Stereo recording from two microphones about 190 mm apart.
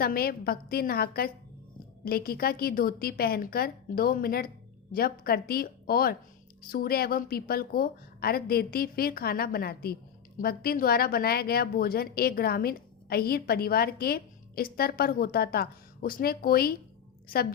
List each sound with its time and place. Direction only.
0.0 s a woman's voice: 55° left (ahead or behind)